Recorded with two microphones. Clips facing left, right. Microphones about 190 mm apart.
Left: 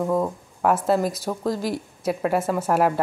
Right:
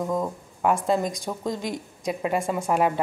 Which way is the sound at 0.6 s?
5° left (ahead or behind).